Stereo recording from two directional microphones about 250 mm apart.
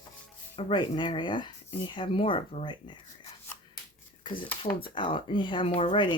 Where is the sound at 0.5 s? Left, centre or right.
Centre.